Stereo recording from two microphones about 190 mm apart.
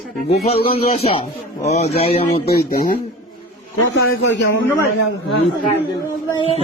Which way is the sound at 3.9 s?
75° left (ahead or behind).